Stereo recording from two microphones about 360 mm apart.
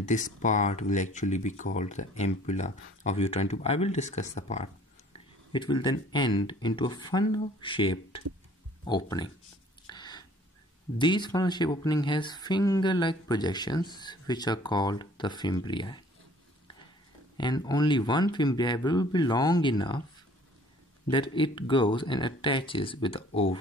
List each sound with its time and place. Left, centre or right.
0.0 s speech: left
9.8 s a sound: centre
11.0 s speech: centre
17.4 s speech: centre
21.1 s speech: centre